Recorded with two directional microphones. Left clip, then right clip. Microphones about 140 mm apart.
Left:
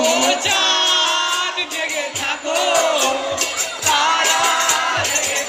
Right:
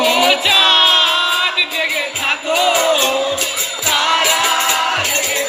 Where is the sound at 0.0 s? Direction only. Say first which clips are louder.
Right 4 dB; 45° left (ahead or behind).